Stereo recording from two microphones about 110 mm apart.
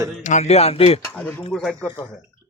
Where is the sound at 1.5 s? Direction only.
Centre (ahead or behind).